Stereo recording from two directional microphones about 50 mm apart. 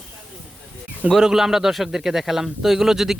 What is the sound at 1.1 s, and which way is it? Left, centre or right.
A man's voice, centre.